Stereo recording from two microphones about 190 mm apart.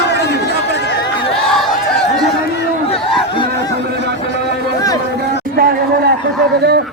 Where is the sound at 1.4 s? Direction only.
Centre (ahead or behind).